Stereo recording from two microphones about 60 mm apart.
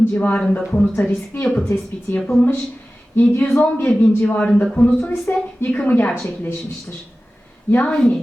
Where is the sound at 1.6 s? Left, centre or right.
Left.